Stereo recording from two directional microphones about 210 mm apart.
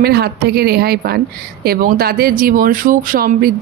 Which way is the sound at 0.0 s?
50° right (ahead or behind).